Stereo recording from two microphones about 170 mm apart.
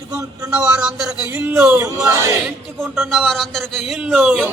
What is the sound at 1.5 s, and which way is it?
Speech, 5° right (ahead or behind).